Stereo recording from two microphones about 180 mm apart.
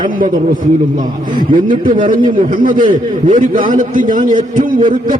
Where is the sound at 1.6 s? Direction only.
50° right (ahead or behind).